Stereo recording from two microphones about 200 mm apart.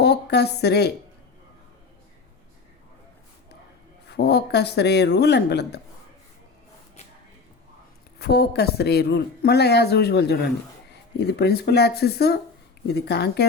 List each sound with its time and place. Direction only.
0.0 s a woman's voice: 55° left (ahead or behind)
4.0 s speech: 55° left (ahead or behind)
8.2 s speech: 55° left (ahead or behind)